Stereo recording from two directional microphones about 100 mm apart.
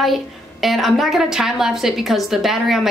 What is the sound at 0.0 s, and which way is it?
A woman's voice, centre (ahead or behind).